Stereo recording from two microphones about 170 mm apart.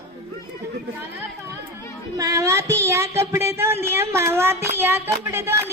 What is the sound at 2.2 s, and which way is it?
Child singing, 20° right (ahead or behind).